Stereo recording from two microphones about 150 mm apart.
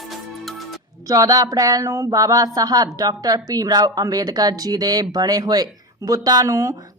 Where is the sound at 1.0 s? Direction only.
25° right (ahead or behind).